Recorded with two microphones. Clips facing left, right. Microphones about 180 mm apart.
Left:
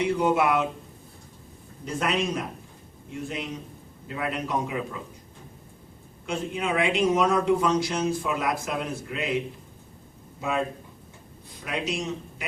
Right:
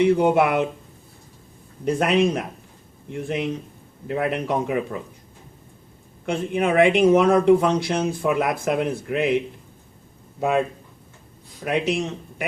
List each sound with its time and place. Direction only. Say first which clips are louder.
0.0 s speech: right 6 dB; 60° right (ahead or behind)
1.8 s speech: right 8 dB; 60° right (ahead or behind)
6.2 s speech: right 6 dB; 60° right (ahead or behind)
11.6 s speech: right 7 dB; 60° right (ahead or behind)